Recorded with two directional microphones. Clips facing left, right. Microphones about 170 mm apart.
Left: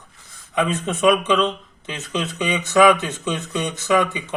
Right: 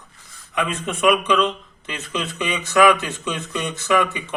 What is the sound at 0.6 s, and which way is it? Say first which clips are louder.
Speech: left 2 dB; 20° left (ahead or behind).